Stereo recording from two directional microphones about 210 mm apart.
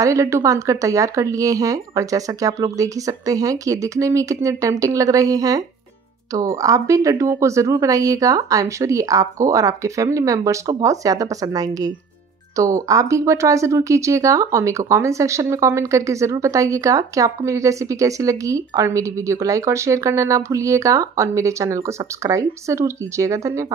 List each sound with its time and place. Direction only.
0.0 s speech: 15° right (ahead or behind)